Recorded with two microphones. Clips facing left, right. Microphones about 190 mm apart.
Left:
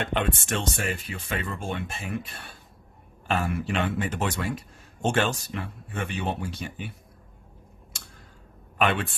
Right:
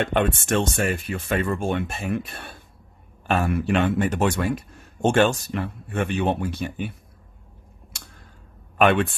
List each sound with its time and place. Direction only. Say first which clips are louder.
0.0 s speech: right 5 dB; 50° right (ahead or behind)
8.8 s speech: right 7 dB; 55° right (ahead or behind)